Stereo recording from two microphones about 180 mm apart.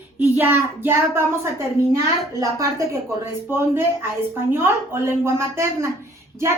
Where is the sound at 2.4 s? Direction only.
15° right (ahead or behind).